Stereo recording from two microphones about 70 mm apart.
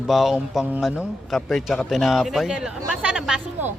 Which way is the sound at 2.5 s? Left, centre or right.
Centre.